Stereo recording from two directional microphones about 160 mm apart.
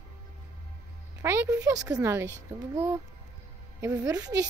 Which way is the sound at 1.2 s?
20° right (ahead or behind).